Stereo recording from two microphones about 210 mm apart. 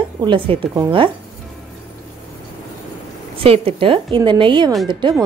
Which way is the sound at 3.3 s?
25° right (ahead or behind).